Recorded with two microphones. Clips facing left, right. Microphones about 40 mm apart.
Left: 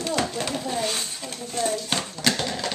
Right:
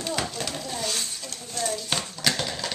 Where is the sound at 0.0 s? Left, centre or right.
Centre.